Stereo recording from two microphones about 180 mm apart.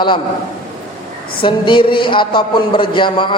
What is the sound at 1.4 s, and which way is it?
A man's voice, 25° left (ahead or behind).